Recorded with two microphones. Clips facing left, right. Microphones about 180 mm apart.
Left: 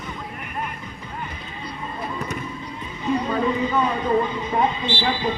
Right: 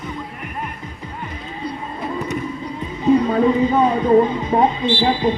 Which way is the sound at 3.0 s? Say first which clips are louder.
Right 7 dB; 40° right (ahead or behind).